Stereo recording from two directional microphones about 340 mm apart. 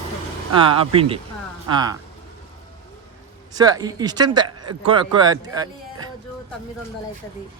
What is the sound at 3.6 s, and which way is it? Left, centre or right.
Speech, centre.